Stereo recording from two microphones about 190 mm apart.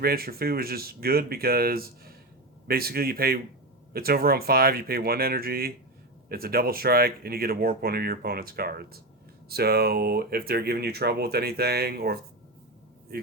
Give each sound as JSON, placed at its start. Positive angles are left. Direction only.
{"t": 0.0, "sound": "speech", "side_deg": -55}